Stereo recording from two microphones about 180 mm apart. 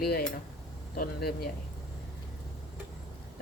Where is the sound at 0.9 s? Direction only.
60° left (ahead or behind).